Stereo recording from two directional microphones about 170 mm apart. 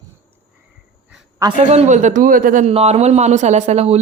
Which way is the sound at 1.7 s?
45° right (ahead or behind).